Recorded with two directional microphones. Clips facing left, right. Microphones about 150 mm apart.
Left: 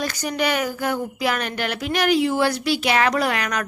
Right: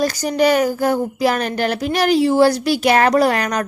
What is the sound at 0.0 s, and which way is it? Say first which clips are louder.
Speech: right 7 dB; 35° right (ahead or behind).